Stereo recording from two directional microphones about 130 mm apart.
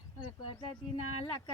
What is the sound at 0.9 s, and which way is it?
Speech, 40° left (ahead or behind).